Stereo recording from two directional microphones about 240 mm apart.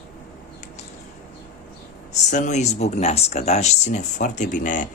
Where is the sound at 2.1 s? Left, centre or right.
Left.